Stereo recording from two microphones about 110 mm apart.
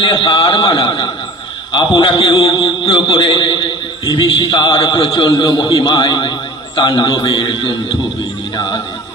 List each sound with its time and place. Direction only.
0.0 s a man's voice: 45° left (ahead or behind)